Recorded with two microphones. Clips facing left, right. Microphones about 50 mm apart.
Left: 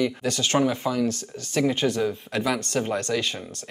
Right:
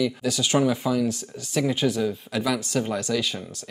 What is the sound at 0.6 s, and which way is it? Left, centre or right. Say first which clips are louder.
Speech: right 1 dB; centre.